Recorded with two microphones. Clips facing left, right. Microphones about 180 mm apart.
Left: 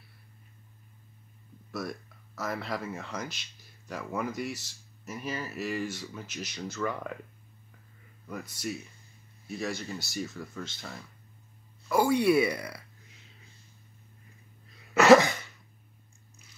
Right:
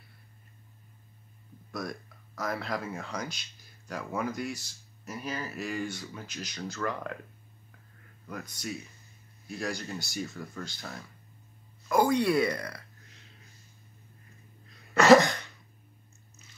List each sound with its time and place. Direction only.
1.7 s speech: 5° left (ahead or behind)
8.3 s speech: 5° left (ahead or behind)
14.7 s a sound: 5° left (ahead or behind)